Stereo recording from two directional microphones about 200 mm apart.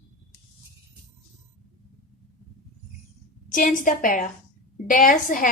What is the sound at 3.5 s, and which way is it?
A woman's voice, 40° left (ahead or behind).